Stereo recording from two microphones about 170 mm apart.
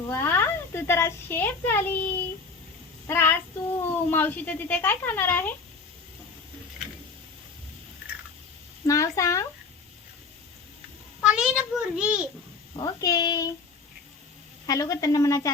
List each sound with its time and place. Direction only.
0.1 s a child's voice: 15° left (ahead or behind)
3.1 s speech: 15° left (ahead or behind)
8.9 s a woman's voice: 20° left (ahead or behind)
11.2 s a child's voice: 5° right (ahead or behind)
12.8 s a woman's voice: 20° left (ahead or behind)
14.7 s a woman's voice: 20° left (ahead or behind)